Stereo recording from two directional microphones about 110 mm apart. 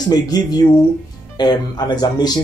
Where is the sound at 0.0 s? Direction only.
35° left (ahead or behind).